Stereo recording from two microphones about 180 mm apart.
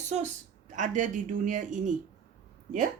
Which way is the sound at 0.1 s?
40° right (ahead or behind).